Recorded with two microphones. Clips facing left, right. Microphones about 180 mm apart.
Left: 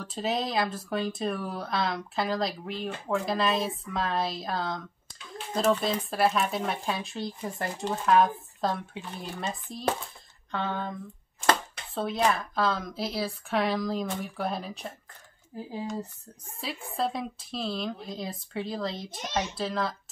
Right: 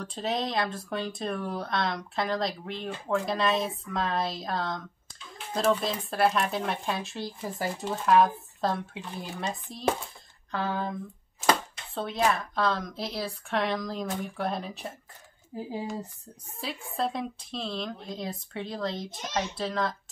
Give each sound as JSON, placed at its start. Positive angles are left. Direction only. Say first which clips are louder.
{"t": 0.0, "sound": "speech", "louder": "left 1 dB", "side_deg": 5}
{"t": 15.5, "sound": "speech", "louder": "right 2 dB", "side_deg": -20}
{"t": 16.5, "sound": "speech", "louder": "even", "side_deg": 0}